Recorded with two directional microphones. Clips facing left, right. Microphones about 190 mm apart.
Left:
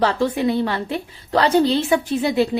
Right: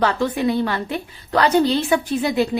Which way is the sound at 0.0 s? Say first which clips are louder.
Left 1 dB; 30° left (ahead or behind).